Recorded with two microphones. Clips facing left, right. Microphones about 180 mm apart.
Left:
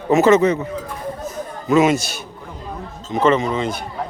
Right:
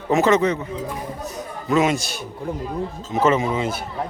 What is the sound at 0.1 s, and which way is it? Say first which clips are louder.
Speech: left 4 dB; 5° left (ahead or behind).